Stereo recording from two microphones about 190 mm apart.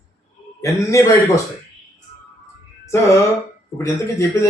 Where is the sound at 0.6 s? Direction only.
15° left (ahead or behind).